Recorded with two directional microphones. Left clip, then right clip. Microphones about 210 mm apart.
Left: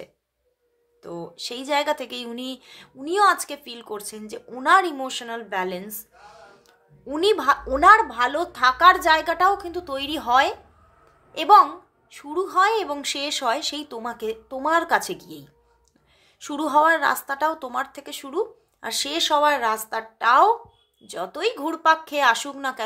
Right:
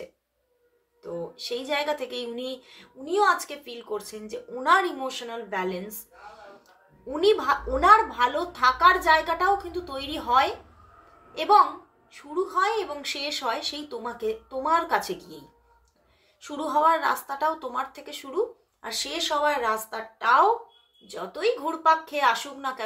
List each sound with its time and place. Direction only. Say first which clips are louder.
1.0 s speech: even; 50° left (ahead or behind)
7.1 s speech: left 2 dB; 50° left (ahead or behind)